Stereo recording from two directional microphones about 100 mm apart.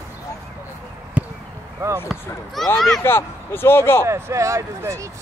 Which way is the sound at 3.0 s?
25° left (ahead or behind).